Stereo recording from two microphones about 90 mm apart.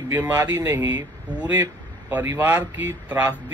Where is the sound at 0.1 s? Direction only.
25° right (ahead or behind).